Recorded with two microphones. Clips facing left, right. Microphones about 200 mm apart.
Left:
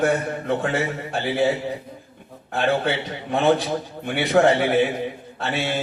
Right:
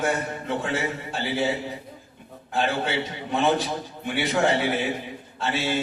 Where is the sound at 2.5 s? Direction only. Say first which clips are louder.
Left 4 dB; 60° left (ahead or behind).